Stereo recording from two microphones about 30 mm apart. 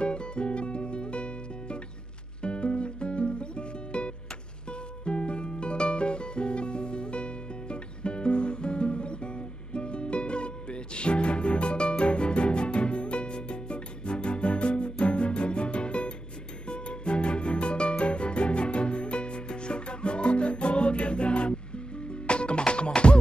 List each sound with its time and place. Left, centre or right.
0.0 s music: left